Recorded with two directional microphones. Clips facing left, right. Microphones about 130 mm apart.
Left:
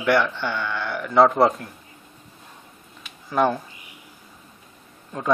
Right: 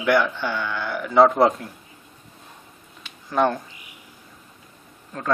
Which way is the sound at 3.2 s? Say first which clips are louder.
Even; 5° left (ahead or behind).